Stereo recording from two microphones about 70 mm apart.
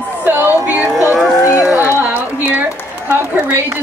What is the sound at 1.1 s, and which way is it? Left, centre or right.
Speech, centre.